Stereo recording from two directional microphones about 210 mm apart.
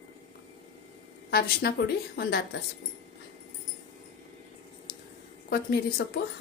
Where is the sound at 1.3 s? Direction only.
50° left (ahead or behind).